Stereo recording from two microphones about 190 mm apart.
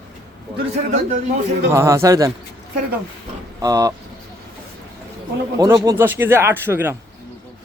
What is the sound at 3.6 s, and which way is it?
Speech, 20° right (ahead or behind).